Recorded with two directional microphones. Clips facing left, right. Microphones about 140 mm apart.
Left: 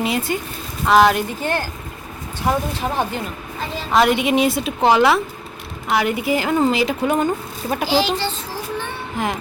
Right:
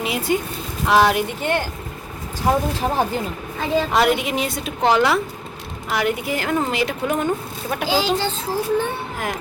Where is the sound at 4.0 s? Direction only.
Centre (ahead or behind).